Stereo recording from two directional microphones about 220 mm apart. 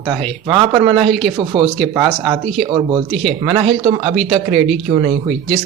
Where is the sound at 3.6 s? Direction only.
25° right (ahead or behind).